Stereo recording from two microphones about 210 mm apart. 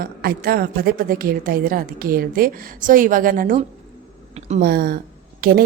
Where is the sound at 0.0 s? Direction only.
45° right (ahead or behind).